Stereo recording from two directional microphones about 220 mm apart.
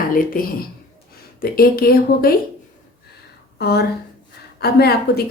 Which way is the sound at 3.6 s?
45° left (ahead or behind).